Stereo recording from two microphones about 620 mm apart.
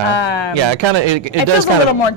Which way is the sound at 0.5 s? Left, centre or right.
Right.